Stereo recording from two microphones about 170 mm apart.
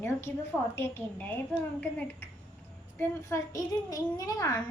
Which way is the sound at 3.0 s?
15° left (ahead or behind).